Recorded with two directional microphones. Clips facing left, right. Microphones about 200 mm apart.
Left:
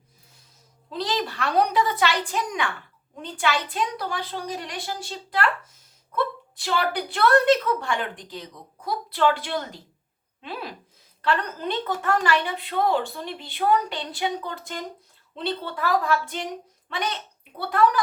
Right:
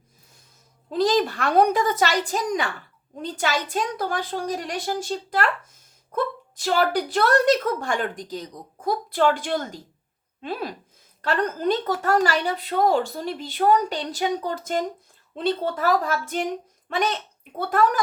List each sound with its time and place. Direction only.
0.9 s a woman's voice: 45° right (ahead or behind)